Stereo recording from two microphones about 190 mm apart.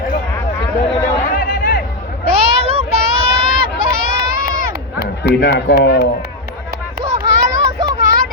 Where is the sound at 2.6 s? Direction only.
30° right (ahead or behind).